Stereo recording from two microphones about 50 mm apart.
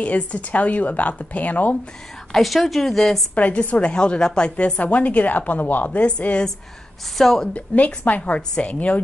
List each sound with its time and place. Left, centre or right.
0.0 s a woman's voice: left
2.3 s speech: centre
3.3 s a woman's voice: left
7.2 s speech: centre
7.5 s a woman's voice: left
8.2 s a woman's voice: centre